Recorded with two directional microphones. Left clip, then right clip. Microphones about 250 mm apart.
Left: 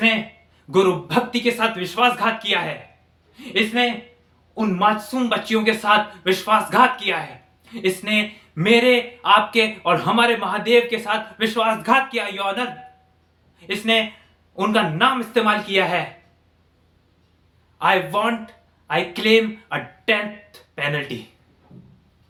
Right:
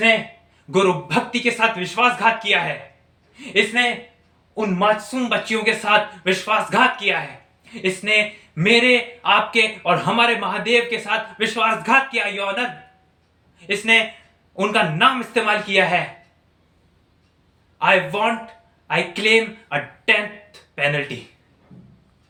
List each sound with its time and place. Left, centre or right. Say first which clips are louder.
0.7 s a man's voice: even; centre
3.3 s a man's voice: right 2 dB; centre
13.7 s a man's voice: right 3 dB; centre
17.7 s speech: right 1 dB; centre